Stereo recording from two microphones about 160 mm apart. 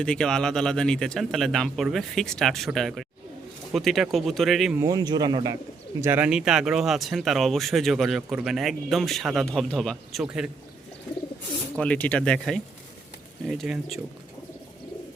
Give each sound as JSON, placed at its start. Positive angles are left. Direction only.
{"t": 0.0, "sound": "speech", "side_deg": 5}
{"t": 4.8, "sound": "speech", "side_deg": -25}
{"t": 6.0, "sound": "speech", "side_deg": -10}
{"t": 11.8, "sound": "speech", "side_deg": 10}